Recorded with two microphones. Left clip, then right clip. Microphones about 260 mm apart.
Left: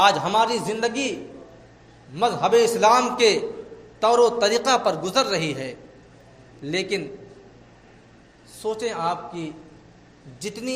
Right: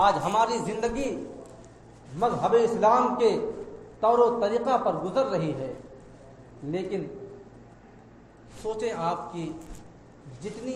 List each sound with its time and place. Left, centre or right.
0.0 s a man's voice: left
2.1 s a man's voice: left
6.7 s a man's voice: left
8.6 s a man's voice: left